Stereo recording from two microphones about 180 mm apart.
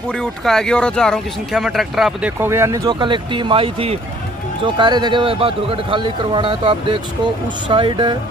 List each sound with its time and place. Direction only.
0.1 s speech: 5° left (ahead or behind)
2.4 s speech: 15° right (ahead or behind)